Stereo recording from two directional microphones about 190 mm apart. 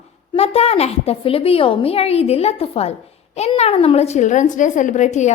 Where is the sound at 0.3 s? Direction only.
35° left (ahead or behind).